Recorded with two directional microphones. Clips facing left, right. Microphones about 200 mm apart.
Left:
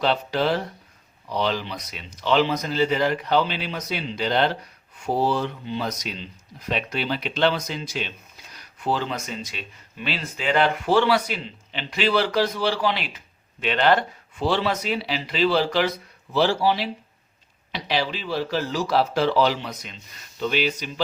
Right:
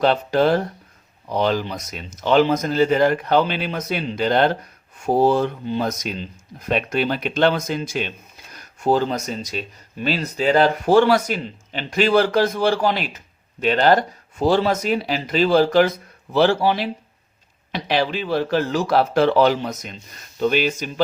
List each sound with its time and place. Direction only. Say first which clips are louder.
0.0 s speech: right 5 dB; 50° right (ahead or behind)